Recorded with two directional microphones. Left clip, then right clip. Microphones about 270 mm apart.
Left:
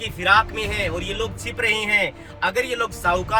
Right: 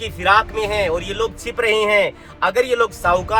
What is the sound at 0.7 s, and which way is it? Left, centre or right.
Speech, centre.